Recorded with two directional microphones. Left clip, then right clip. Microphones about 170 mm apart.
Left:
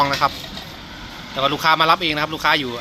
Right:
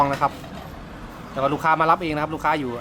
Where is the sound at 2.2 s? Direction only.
Centre (ahead or behind).